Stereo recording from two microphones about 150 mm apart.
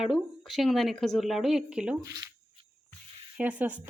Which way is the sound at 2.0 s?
20° right (ahead or behind).